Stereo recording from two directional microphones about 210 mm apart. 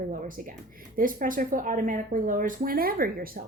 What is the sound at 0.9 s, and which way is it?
Speech, 40° right (ahead or behind).